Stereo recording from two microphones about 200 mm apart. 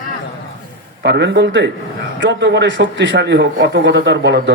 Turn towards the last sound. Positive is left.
turn(degrees=-60)  # may be behind; listen again after turning